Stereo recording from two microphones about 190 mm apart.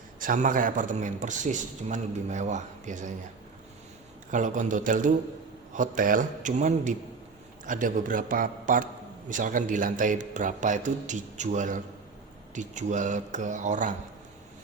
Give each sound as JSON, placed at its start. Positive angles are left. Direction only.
{"t": 0.2, "sound": "a man's voice", "side_deg": -45}
{"t": 4.3, "sound": "a man's voice", "side_deg": -40}